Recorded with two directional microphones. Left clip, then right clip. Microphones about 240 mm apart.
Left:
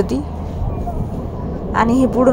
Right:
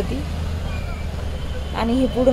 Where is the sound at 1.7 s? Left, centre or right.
Centre.